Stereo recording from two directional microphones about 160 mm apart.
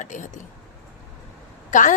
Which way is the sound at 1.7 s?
55° left (ahead or behind).